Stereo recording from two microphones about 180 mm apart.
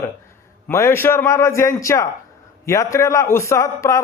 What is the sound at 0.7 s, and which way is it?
A man's voice, 15° left (ahead or behind).